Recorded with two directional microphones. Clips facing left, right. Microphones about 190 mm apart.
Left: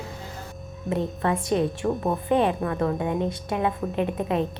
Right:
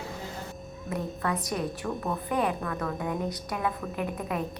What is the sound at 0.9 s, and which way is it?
A woman's voice, 25° left (ahead or behind).